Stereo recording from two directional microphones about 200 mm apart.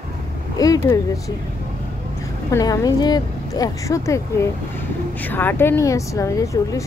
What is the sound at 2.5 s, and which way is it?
Speech, 15° left (ahead or behind).